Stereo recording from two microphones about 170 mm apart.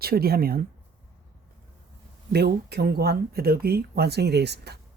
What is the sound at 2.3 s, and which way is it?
Speech, 75° right (ahead or behind).